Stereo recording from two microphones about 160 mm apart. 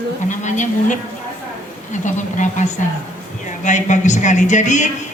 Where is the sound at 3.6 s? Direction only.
50° left (ahead or behind).